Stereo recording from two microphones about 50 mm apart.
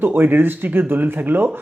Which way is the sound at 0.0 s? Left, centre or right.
Right.